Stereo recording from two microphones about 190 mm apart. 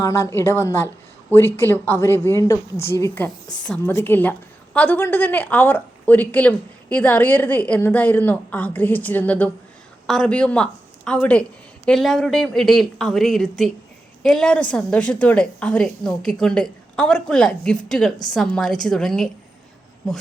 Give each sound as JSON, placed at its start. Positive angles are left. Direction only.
{"t": 0.0, "sound": "a woman's voice", "side_deg": 15}